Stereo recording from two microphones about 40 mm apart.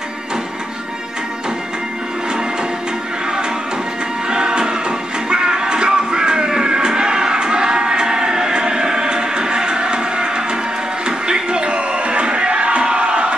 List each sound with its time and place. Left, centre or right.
4.3 s music: centre